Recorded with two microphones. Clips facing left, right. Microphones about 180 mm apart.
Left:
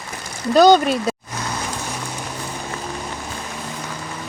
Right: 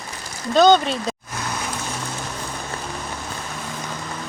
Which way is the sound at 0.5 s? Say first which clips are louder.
Left 2 dB; 5° left (ahead or behind).